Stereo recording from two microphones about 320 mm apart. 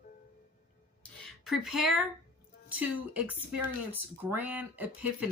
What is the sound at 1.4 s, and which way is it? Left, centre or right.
Speech, centre.